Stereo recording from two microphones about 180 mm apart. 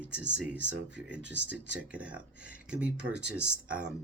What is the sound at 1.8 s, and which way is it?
Speech, 5° right (ahead or behind).